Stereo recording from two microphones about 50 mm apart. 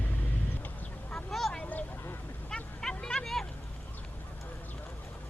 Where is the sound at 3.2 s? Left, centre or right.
Centre.